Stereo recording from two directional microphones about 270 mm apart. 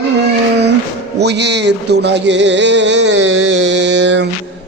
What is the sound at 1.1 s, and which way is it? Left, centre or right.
Speech, right.